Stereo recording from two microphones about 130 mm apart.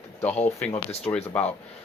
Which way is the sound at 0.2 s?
15° left (ahead or behind).